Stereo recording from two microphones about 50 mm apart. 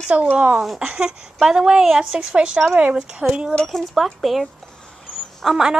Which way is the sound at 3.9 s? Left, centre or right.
Centre.